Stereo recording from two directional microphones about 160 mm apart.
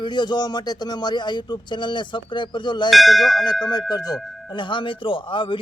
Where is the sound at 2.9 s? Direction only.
Centre (ahead or behind).